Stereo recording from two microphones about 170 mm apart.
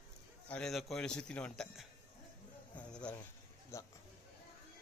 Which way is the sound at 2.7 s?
5° left (ahead or behind).